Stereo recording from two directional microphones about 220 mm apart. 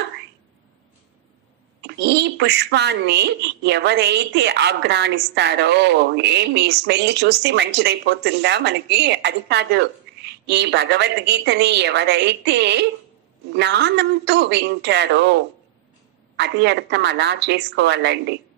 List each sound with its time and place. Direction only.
1.8 s speech: 50° right (ahead or behind)